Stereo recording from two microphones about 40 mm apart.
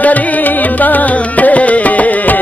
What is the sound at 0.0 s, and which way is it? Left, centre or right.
Music, left.